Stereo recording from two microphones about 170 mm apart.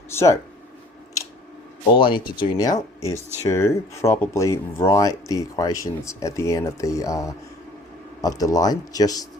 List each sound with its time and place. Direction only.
0.1 s speech: 15° left (ahead or behind)
2.0 s speech: 30° left (ahead or behind)